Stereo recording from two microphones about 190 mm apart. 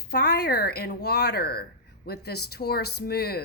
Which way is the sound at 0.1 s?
60° left (ahead or behind).